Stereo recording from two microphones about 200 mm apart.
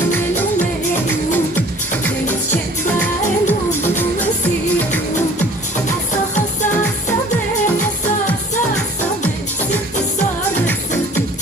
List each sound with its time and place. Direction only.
3.0 s music: 10° left (ahead or behind)
6.3 s music: 35° left (ahead or behind)